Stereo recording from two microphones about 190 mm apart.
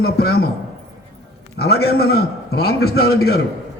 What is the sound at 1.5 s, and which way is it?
A man's voice, 55° left (ahead or behind).